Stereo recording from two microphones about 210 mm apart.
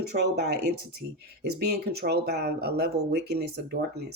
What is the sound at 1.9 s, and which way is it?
Speech, 50° right (ahead or behind).